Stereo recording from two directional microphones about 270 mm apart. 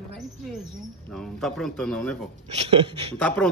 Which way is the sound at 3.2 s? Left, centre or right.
Centre.